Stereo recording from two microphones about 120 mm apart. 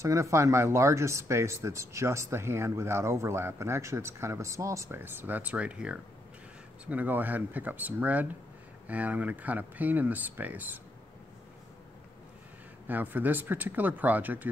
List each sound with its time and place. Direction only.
0.0 s speech: 25° right (ahead or behind)
12.8 s speech: 15° right (ahead or behind)